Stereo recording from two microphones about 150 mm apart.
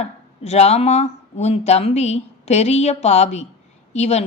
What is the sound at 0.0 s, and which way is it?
A woman's voice, 45° left (ahead or behind).